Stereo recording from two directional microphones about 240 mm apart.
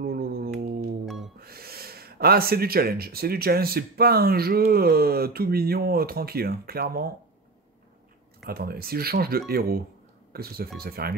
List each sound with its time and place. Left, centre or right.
0.0 s a sound: right
1.0 s music: centre
1.4 s speech: right
8.5 s speech: right